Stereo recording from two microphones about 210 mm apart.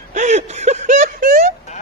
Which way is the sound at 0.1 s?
35° right (ahead or behind).